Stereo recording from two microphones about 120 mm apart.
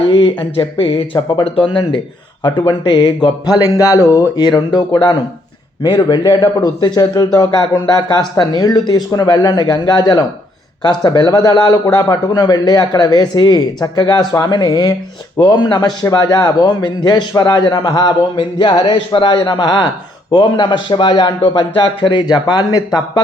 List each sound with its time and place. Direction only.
0.1 s a man's voice: 45° left (ahead or behind)